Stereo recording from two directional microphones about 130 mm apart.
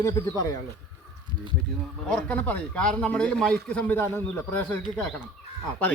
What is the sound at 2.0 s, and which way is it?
A man's voice, 5° left (ahead or behind).